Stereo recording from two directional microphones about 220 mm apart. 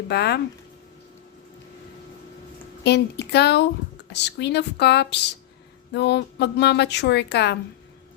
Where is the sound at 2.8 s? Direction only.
50° left (ahead or behind).